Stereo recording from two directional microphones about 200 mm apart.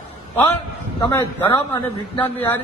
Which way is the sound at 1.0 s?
20° left (ahead or behind).